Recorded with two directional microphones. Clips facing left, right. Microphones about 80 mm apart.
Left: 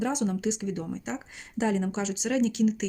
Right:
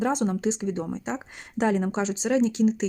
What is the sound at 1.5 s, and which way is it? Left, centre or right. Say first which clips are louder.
Speech: right 3 dB; right.